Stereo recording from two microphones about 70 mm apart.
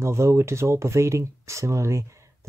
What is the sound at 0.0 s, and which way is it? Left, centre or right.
Speech, right.